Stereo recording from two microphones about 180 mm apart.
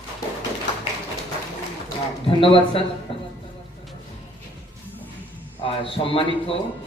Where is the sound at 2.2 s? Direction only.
30° left (ahead or behind).